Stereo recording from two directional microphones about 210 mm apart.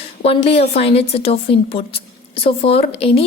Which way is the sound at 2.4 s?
30° left (ahead or behind).